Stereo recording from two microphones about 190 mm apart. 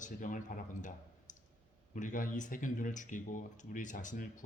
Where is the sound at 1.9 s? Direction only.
45° left (ahead or behind).